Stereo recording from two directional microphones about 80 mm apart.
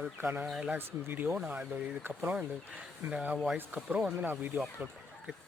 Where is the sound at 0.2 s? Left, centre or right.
Right.